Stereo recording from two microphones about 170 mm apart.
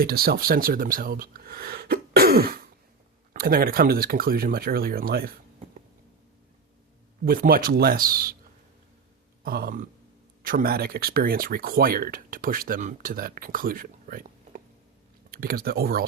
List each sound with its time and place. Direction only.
0.0 s speech: 65° right (ahead or behind)
7.3 s speech: 60° right (ahead or behind)
9.4 s a sound: 60° right (ahead or behind)
10.4 s speech: 60° right (ahead or behind)